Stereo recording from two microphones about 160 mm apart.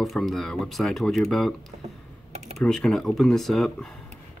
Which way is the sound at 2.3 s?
45° right (ahead or behind).